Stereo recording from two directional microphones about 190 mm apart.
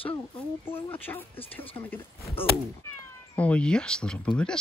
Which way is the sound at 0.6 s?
10° left (ahead or behind).